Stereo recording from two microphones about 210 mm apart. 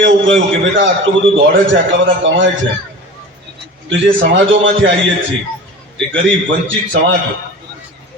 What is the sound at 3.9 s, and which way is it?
A man's voice, 60° right (ahead or behind).